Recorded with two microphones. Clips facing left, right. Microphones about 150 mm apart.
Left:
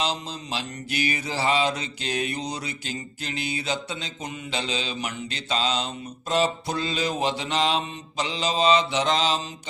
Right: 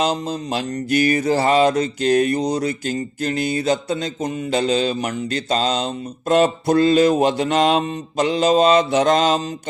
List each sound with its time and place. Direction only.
0.0 s mantra: 45° right (ahead or behind)